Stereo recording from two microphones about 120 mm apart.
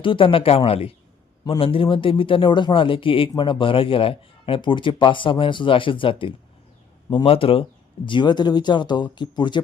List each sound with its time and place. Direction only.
0.0 s speech: 45° left (ahead or behind)